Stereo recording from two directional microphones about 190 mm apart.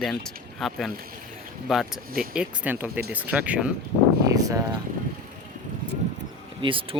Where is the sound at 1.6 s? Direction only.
Centre (ahead or behind).